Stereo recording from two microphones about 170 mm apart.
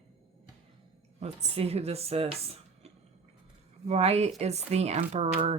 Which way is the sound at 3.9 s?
40° right (ahead or behind).